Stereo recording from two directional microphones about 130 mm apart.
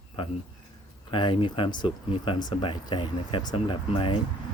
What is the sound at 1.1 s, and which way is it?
Speech, 40° left (ahead or behind).